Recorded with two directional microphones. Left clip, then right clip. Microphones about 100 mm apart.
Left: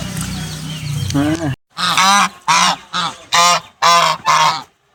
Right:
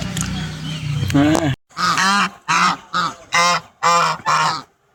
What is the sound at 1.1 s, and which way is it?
Speech, 5° right (ahead or behind).